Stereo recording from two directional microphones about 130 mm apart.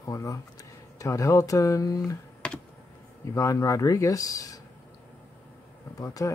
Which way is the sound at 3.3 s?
25° left (ahead or behind).